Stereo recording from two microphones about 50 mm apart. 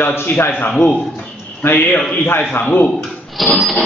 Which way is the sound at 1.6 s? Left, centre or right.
Left.